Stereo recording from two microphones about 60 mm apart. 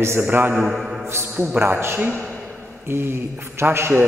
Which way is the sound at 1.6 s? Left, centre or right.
Right.